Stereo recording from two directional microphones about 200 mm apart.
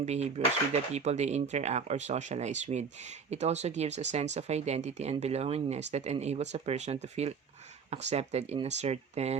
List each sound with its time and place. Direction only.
0.0 s speech: 35° right (ahead or behind)